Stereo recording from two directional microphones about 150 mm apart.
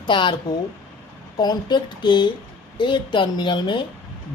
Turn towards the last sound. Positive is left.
turn(degrees=30)  # may be behind; listen again after turning